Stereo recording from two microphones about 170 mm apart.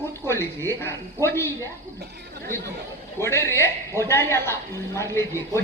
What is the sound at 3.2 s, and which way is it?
Speech, 15° left (ahead or behind).